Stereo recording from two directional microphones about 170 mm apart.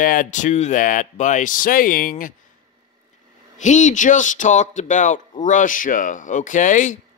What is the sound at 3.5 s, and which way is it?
Speech, 45° left (ahead or behind).